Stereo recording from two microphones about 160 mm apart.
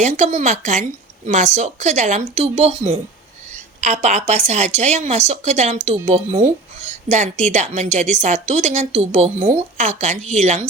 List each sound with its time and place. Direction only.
0.0 s a woman's voice: 45° right (ahead or behind)